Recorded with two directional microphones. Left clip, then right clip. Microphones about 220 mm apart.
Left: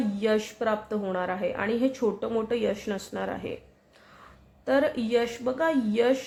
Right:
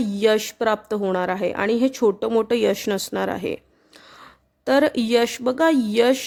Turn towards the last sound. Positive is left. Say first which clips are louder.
# right 6 dB
turn(degrees=-50)  # may be behind; listen again after turning